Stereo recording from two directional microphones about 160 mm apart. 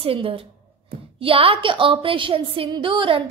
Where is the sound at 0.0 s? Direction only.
35° right (ahead or behind).